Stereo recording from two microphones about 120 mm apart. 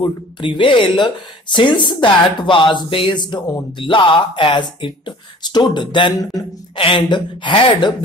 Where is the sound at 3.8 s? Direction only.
45° left (ahead or behind).